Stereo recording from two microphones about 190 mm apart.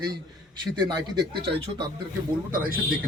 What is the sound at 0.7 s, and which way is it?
Speech, 20° right (ahead or behind).